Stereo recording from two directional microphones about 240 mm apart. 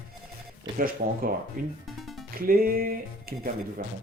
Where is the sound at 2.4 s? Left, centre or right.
Right.